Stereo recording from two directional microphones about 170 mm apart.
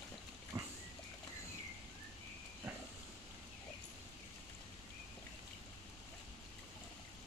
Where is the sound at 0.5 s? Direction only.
20° right (ahead or behind).